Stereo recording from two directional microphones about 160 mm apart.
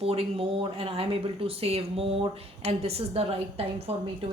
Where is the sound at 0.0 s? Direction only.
35° right (ahead or behind).